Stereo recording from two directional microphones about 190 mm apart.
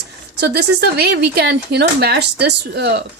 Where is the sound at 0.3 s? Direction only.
60° right (ahead or behind).